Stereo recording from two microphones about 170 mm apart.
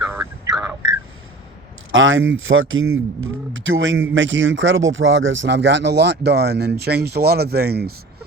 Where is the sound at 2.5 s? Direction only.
90° right.